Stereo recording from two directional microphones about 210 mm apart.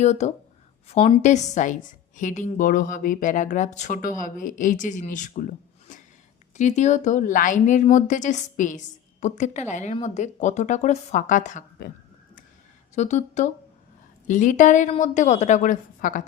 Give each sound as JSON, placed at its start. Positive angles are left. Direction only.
{"t": 0.0, "sound": "a woman's voice", "side_deg": 30}
{"t": 12.9, "sound": "a woman's voice", "side_deg": 35}